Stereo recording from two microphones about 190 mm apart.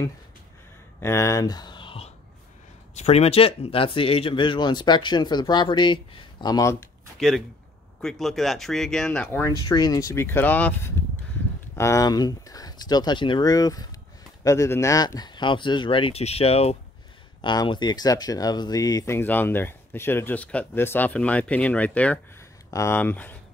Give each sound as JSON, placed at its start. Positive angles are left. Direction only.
{"t": 1.0, "sound": "speech", "side_deg": 15}
{"t": 7.2, "sound": "speech", "side_deg": 0}
{"t": 9.7, "sound": "speech", "side_deg": 20}